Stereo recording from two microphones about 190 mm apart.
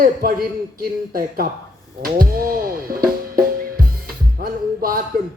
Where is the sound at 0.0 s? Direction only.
50° right (ahead or behind).